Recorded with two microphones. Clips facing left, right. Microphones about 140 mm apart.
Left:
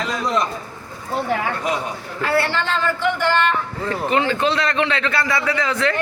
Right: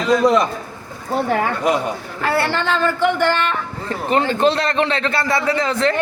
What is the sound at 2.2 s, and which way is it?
A man's voice, 50° right (ahead or behind).